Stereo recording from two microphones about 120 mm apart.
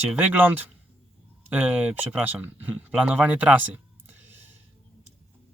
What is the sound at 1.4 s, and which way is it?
Speech, 15° right (ahead or behind).